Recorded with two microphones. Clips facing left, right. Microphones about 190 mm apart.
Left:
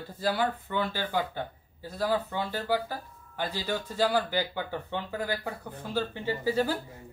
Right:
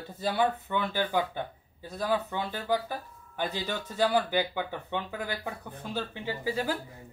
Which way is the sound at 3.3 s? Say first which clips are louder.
Left 1 dB; 15° right (ahead or behind).